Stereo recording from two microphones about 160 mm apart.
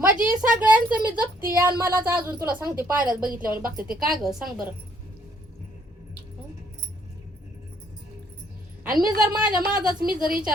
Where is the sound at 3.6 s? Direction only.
65° right (ahead or behind).